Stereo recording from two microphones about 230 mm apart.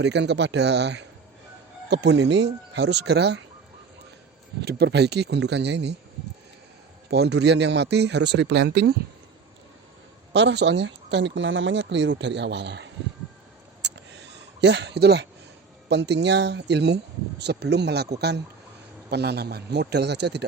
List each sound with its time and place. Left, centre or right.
0.0 s speech: right
4.6 s speech: right
7.1 s speech: right
10.3 s speech: right
13.8 s a sound: right
14.6 s speech: right